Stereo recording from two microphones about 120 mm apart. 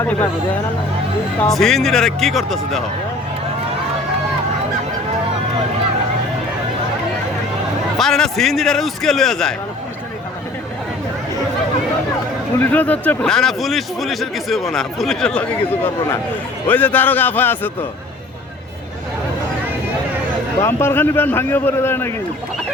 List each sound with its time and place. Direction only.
0.0 s a man's voice: 15° left (ahead or behind)
1.5 s a man's voice: centre (ahead or behind)
7.9 s a man's voice: 5° left (ahead or behind)
12.5 s a man's voice: 15° left (ahead or behind)
20.6 s a man's voice: 20° left (ahead or behind)